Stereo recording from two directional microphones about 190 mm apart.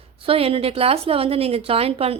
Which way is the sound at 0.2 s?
30° right (ahead or behind).